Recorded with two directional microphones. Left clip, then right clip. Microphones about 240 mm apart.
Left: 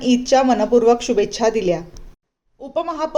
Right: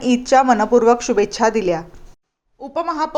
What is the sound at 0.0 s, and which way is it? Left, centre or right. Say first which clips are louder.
A woman's voice: right 1 dB; centre.